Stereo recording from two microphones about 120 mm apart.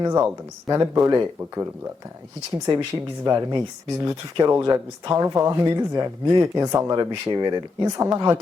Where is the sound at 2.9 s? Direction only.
25° right (ahead or behind).